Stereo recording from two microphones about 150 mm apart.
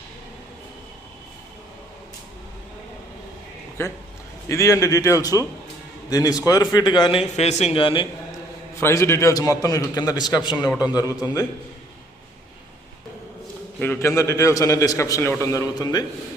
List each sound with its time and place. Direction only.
3.8 s a man's voice: 15° left (ahead or behind)
7.3 s speech: 45° left (ahead or behind)
8.8 s a man's voice: 20° left (ahead or behind)
13.7 s a man's voice: 10° left (ahead or behind)